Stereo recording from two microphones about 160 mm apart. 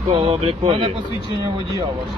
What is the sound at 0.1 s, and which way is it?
Speech, 35° right (ahead or behind).